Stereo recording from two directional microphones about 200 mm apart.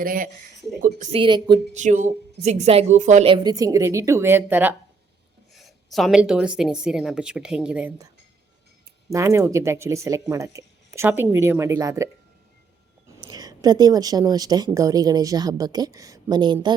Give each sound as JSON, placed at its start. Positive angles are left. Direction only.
{"t": 0.0, "sound": "speech", "side_deg": -45}
{"t": 1.2, "sound": "speech", "side_deg": -20}
{"t": 1.7, "sound": "speech", "side_deg": -35}
{"t": 3.3, "sound": "speech", "side_deg": -20}
{"t": 5.5, "sound": "a woman's voice", "side_deg": 0}
{"t": 9.0, "sound": "speech", "side_deg": -15}
{"t": 13.1, "sound": "speech", "side_deg": -20}